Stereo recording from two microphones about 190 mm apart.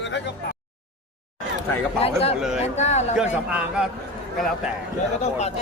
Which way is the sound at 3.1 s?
5° right (ahead or behind).